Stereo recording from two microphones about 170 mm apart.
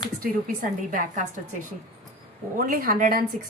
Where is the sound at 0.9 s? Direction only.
50° right (ahead or behind).